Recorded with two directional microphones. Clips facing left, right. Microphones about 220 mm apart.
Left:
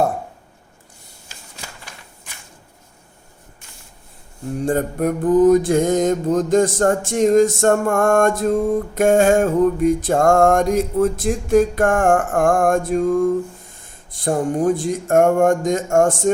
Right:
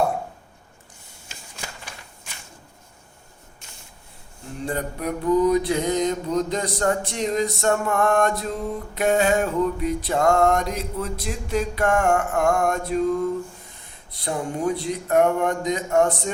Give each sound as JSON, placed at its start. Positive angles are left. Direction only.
{"t": 4.5, "sound": "mantra", "side_deg": 45}